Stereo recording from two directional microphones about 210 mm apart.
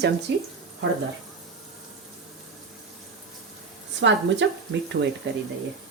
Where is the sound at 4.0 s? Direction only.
60° right (ahead or behind).